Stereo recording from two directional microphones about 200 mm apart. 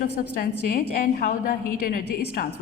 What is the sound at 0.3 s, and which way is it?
A woman's voice, 45° left (ahead or behind).